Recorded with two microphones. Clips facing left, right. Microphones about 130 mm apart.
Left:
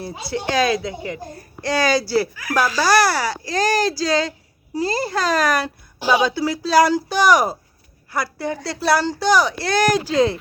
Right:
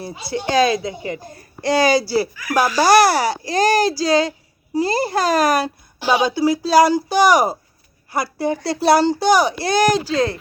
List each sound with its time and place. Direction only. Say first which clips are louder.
0.3 s speech: right 3 dB; centre (ahead or behind)
1.6 s a child's voice: right 3 dB; 10° right (ahead or behind)
2.5 s a child's voice: right 4 dB; 15° right (ahead or behind)
6.1 s speech: even; 25° right (ahead or behind)
6.3 s a child's voice: right 3 dB; 5° right (ahead or behind)
10.1 s speech: left 2 dB; 20° left (ahead or behind)